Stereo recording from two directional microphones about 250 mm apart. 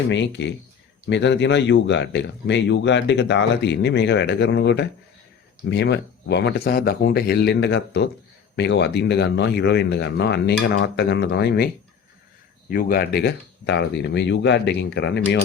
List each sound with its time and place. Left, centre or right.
0.1 s speech: left